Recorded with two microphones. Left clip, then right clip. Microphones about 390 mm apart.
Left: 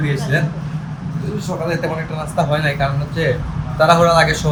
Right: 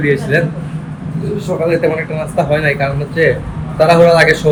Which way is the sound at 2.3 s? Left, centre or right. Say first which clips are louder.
Right 4 dB; centre.